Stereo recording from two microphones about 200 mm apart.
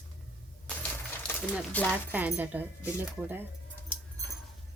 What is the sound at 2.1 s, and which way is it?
Speech, 5° right (ahead or behind).